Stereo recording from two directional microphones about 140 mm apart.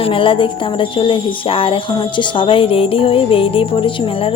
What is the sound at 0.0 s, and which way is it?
Speech, 40° left (ahead or behind).